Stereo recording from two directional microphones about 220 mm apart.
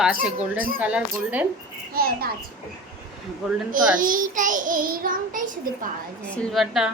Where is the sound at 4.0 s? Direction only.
40° right (ahead or behind).